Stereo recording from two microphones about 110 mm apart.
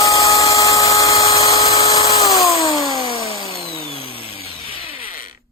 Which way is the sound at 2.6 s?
30° left (ahead or behind).